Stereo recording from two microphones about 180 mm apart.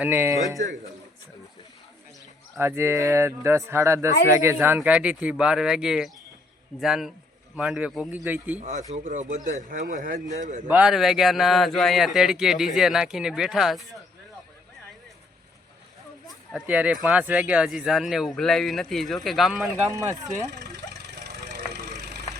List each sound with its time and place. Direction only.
0.0 s speech: 10° right (ahead or behind)
2.6 s speech: 15° right (ahead or behind)
8.9 s speech: 45° right (ahead or behind)
10.7 s speech: 5° right (ahead or behind)
16.5 s speech: 5° right (ahead or behind)
19.9 s speech: 20° right (ahead or behind)
20.5 s vehicle: 65° right (ahead or behind)